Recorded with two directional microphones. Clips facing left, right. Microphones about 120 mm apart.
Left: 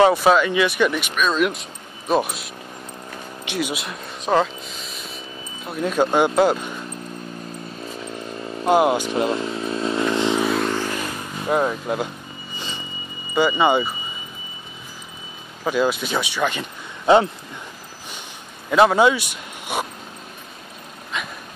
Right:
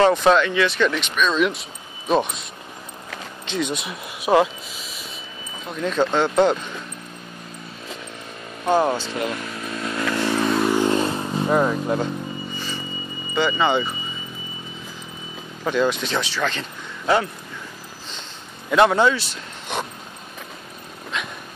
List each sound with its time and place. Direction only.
0.0 s a man's voice: 5° left (ahead or behind)
3.4 s speech: 5° left (ahead or behind)
5.7 s speech: 10° left (ahead or behind)
8.6 s speech: 15° left (ahead or behind)
9.2 s motorcycle: 25° left (ahead or behind)
10.4 s vehicle: centre (ahead or behind)
10.9 s vehicle: 25° right (ahead or behind)
11.4 s speech: 5° left (ahead or behind)
12.5 s a sound: 20° left (ahead or behind)
13.3 s speech: 10° left (ahead or behind)
15.6 s speech: 10° left (ahead or behind)
18.7 s a man's voice: 5° left (ahead or behind)